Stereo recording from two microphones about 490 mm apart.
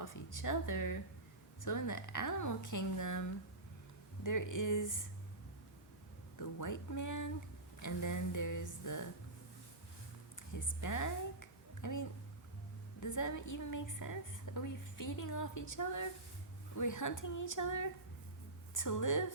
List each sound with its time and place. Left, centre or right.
0.0 s a woman's voice: left
6.4 s a woman's voice: left
10.5 s a woman's voice: left